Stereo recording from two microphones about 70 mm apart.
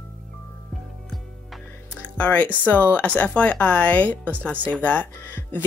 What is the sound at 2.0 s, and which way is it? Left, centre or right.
Music, centre.